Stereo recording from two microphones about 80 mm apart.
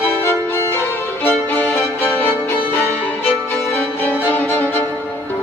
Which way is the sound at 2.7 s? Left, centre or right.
Left.